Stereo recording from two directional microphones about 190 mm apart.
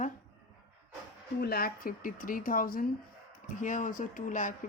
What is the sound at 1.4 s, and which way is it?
Speech, 55° left (ahead or behind).